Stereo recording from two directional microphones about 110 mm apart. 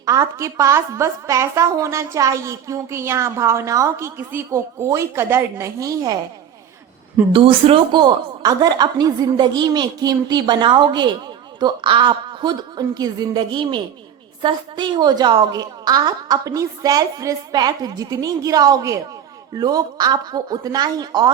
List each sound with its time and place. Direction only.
0.0 s a woman's voice: 30° right (ahead or behind)
7.3 s a woman's voice: 55° right (ahead or behind)
8.0 s a woman's voice: 40° right (ahead or behind)